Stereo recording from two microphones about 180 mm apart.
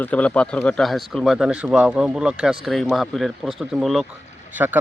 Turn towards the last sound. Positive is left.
turn(degrees=-10)  # may be behind; listen again after turning